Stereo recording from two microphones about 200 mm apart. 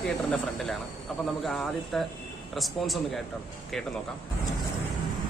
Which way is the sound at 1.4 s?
Centre (ahead or behind).